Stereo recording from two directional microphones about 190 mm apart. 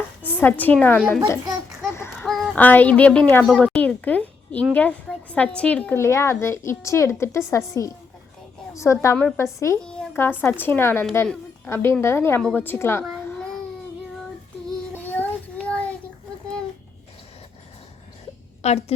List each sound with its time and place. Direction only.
0.3 s a woman's voice: 10° left (ahead or behind)
2.0 s fowl: 5° left (ahead or behind)
3.4 s a child's voice: centre (ahead or behind)
9.8 s a woman's voice: 5° left (ahead or behind)
13.0 s a sound: centre (ahead or behind)
14.9 s child singing: 10° left (ahead or behind)
18.6 s a woman's voice: 35° left (ahead or behind)